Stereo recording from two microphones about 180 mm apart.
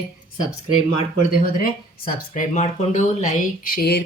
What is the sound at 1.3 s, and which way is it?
Speech, 55° left (ahead or behind).